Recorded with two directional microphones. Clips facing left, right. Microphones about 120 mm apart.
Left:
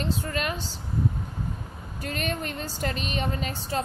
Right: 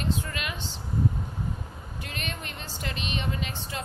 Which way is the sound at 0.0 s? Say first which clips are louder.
Left 3 dB; 40° left (ahead or behind).